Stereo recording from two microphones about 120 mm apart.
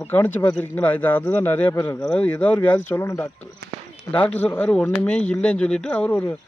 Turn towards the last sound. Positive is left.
turn(degrees=15)  # may be behind; listen again after turning